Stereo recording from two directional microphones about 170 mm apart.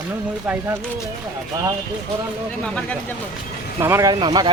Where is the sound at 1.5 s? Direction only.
25° right (ahead or behind).